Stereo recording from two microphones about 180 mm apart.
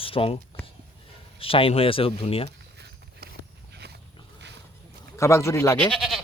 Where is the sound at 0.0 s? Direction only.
30° left (ahead or behind).